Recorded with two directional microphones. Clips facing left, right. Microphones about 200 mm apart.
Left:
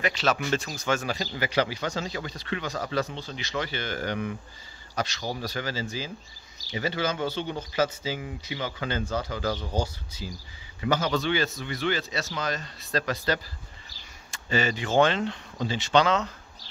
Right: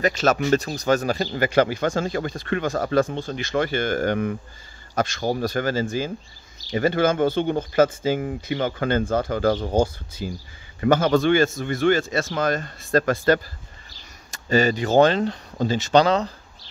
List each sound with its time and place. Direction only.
0.0 s speech: 45° right (ahead or behind)
13.8 s a sound: 40° right (ahead or behind)
15.5 s speech: 45° right (ahead or behind)